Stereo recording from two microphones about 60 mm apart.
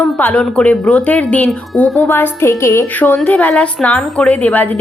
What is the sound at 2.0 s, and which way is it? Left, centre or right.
Speech, left.